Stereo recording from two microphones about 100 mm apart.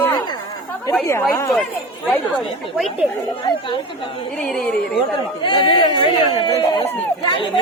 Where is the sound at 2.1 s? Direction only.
Centre (ahead or behind).